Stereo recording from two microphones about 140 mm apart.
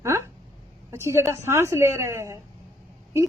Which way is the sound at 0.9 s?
20° right (ahead or behind).